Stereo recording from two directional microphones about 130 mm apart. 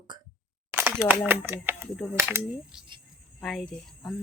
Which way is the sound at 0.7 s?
15° right (ahead or behind).